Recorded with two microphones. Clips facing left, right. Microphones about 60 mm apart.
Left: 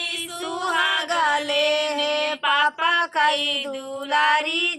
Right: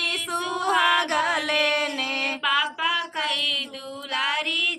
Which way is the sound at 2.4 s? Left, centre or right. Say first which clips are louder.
Left 3 dB; centre.